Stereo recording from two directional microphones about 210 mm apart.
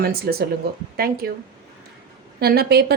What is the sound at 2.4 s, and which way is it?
Speech, 50° right (ahead or behind).